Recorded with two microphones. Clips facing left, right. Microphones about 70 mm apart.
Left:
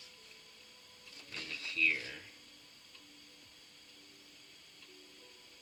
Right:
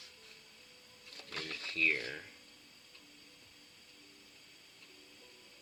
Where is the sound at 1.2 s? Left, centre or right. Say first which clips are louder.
Right 3 dB; right.